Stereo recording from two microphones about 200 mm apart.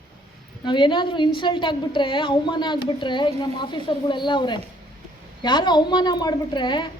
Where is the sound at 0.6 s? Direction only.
25° left (ahead or behind).